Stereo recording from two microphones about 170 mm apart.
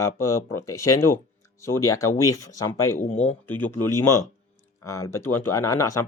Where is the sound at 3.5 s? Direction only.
10° left (ahead or behind).